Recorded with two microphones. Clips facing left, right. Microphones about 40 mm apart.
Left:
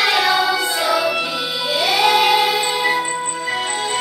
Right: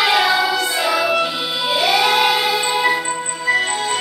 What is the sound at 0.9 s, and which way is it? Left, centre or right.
Music, centre.